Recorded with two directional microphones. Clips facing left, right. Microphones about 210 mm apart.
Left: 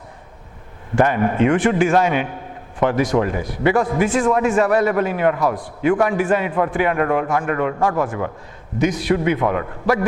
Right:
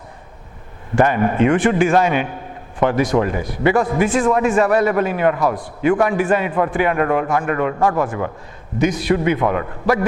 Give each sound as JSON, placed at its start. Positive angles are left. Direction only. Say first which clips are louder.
{"t": 0.9, "sound": "a man's voice", "louder": "right 1 dB", "side_deg": -15}